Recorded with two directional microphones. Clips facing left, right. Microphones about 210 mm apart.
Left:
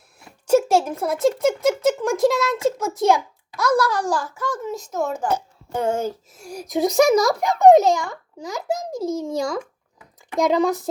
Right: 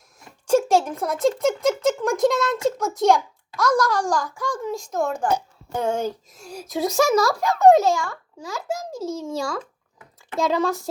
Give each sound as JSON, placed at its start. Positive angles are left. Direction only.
{"t": 0.2, "sound": "a child's voice", "side_deg": 10}